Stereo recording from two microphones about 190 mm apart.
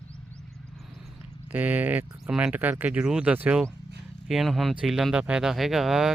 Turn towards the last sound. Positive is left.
turn(degrees=0)  # may be behind; listen again after turning